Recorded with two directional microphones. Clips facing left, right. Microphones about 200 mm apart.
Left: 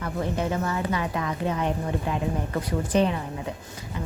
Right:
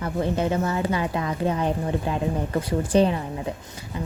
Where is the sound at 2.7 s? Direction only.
30° right (ahead or behind).